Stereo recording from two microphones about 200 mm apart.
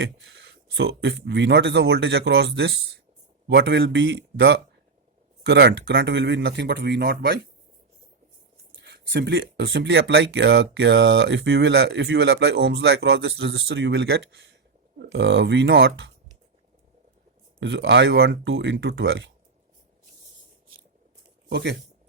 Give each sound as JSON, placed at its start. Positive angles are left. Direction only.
{"t": 0.0, "sound": "speech", "side_deg": -65}
{"t": 5.4, "sound": "speech", "side_deg": -55}
{"t": 8.8, "sound": "speech", "side_deg": -60}
{"t": 17.6, "sound": "speech", "side_deg": -65}
{"t": 21.5, "sound": "speech", "side_deg": -60}